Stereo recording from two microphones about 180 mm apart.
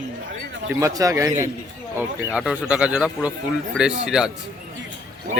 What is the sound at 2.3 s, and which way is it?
Speech, 5° right (ahead or behind).